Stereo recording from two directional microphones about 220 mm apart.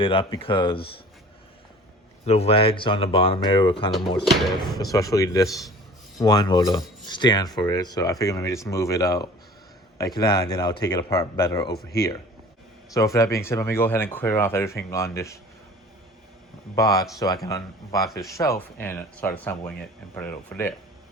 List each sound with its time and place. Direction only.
0.0 s speech: 25° left (ahead or behind)
2.2 s speech: 30° left (ahead or behind)
12.9 s speech: 15° left (ahead or behind)
16.7 s speech: 15° left (ahead or behind)
18.0 s speech: centre (ahead or behind)